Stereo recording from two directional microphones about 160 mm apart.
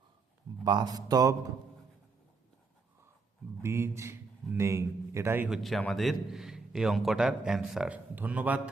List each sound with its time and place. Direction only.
0.6 s speech: 25° right (ahead or behind)
3.6 s a man's voice: 15° right (ahead or behind)
5.5 s a man's voice: centre (ahead or behind)